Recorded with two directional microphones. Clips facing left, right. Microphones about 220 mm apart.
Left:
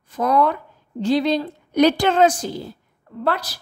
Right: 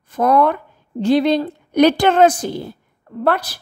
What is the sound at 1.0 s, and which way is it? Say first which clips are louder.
A woman's voice: right 4 dB; 60° right (ahead or behind).